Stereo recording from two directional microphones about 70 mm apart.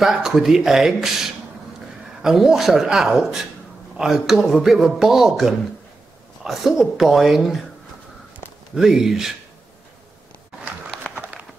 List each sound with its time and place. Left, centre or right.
0.0 s speech: centre
2.2 s speech: centre
8.7 s speech: centre
11.1 s a sound: right